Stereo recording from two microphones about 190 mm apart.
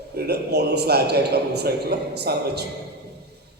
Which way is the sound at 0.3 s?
60° right (ahead or behind).